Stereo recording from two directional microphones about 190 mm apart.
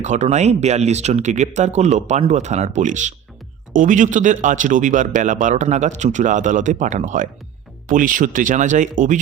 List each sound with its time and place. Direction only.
0.0 s a man's voice: 35° right (ahead or behind)